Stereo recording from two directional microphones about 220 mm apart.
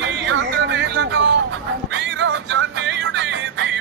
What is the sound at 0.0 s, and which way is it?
Music, 55° right (ahead or behind).